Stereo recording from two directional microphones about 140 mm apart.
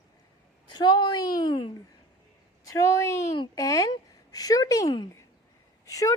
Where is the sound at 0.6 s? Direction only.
35° left (ahead or behind).